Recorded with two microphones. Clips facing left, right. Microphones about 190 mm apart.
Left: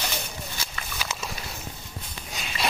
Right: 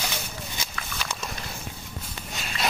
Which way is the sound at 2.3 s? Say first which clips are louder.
Even; centre (ahead or behind).